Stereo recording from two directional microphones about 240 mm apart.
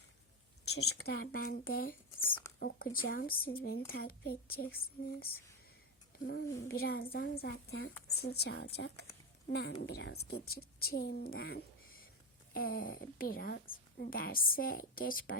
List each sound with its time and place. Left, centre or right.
0.9 s a woman's voice: left
2.2 s speech: centre
2.6 s a woman's voice: left